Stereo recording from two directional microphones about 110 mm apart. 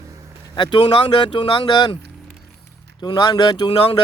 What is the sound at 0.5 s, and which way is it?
Speech, 45° left (ahead or behind).